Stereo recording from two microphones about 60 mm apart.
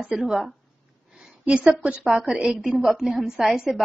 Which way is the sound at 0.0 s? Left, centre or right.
Centre.